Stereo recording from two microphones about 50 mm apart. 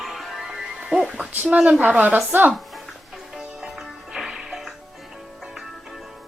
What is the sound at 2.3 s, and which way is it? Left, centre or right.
Speech, right.